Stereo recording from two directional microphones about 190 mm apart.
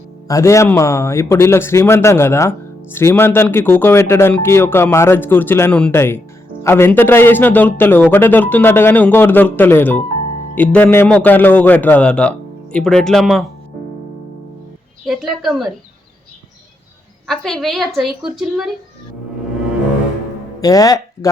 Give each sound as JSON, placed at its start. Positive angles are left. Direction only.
{"t": 0.3, "sound": "a man's voice", "side_deg": 15}
{"t": 15.0, "sound": "a woman's voice", "side_deg": 0}
{"t": 17.2, "sound": "a woman's voice", "side_deg": 0}
{"t": 20.6, "sound": "speech", "side_deg": 20}